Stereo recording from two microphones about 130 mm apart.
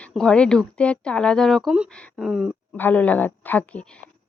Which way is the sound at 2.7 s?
15° left (ahead or behind).